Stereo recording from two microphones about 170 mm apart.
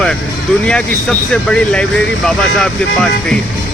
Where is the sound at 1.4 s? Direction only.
5° left (ahead or behind).